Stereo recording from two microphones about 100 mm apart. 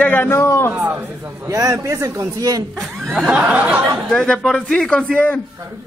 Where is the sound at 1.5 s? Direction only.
35° right (ahead or behind).